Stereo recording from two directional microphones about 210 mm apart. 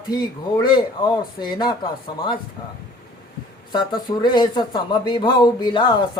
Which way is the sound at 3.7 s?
20° left (ahead or behind).